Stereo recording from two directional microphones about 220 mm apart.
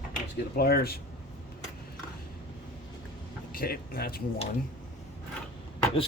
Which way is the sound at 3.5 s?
45° left (ahead or behind).